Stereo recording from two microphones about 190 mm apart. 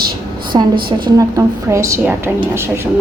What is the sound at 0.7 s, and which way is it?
Speech, 50° right (ahead or behind).